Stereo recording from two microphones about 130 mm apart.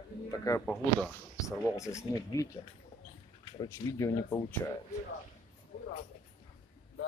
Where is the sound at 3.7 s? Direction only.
20° left (ahead or behind).